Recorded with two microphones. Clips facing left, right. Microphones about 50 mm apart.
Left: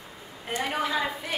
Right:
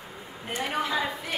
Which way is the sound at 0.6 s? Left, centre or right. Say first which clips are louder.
Even; centre.